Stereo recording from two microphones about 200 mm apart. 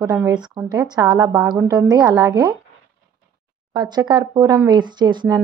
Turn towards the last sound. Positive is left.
turn(degrees=-20)  # may be behind; listen again after turning